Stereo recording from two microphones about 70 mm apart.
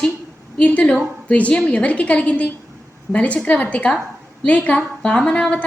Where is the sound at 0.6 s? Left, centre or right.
Centre.